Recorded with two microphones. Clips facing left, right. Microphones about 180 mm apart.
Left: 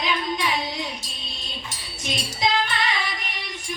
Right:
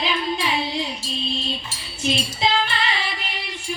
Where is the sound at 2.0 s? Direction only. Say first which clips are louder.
Right 4 dB; 30° right (ahead or behind).